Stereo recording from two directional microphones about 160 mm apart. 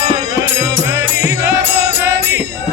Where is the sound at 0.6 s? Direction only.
15° right (ahead or behind).